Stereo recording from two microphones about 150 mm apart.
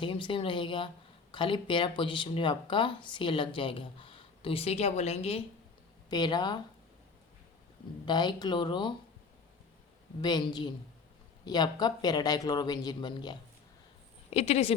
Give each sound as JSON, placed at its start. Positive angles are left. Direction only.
{"t": 0.0, "sound": "speech", "side_deg": 35}
{"t": 6.1, "sound": "speech", "side_deg": 30}
{"t": 8.0, "sound": "speech", "side_deg": 30}
{"t": 10.2, "sound": "speech", "side_deg": 30}
{"t": 14.3, "sound": "a woman's voice", "side_deg": 45}